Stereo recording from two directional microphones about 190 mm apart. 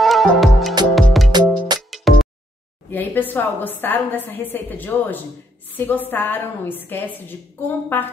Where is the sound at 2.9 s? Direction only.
10° left (ahead or behind).